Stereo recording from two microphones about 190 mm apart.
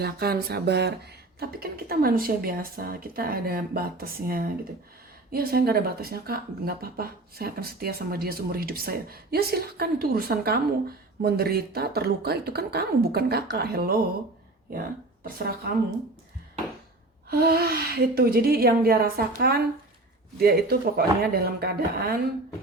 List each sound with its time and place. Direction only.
0.0 s speech: 55° right (ahead or behind)
15.2 s speech: 50° right (ahead or behind)
17.2 s speech: 55° right (ahead or behind)